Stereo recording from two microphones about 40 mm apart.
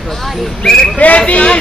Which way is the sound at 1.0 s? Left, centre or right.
Left.